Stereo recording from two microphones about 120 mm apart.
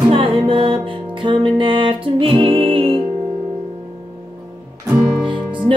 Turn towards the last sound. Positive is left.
turn(degrees=-45)  # may be behind; listen again after turning